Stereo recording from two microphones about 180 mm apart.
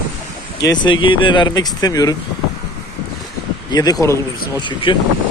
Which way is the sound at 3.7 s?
20° left (ahead or behind).